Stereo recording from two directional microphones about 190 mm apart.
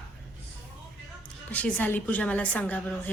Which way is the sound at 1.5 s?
10° left (ahead or behind).